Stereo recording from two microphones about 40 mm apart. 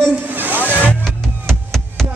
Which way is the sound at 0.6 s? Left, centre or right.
Left.